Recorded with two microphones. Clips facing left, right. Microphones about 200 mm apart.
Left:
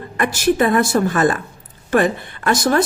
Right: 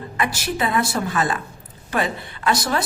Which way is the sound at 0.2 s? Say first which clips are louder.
Left 8 dB; 50° left (ahead or behind).